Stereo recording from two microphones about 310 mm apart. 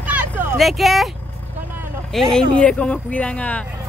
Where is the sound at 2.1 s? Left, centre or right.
Centre.